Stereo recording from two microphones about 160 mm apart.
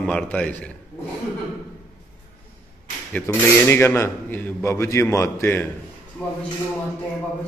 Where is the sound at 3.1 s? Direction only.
10° left (ahead or behind).